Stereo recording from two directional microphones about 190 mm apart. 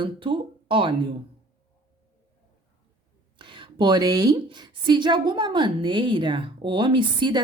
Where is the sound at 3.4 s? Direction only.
25° right (ahead or behind).